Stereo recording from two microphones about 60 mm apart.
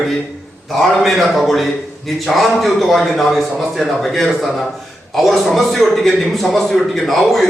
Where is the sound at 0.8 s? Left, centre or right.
Centre.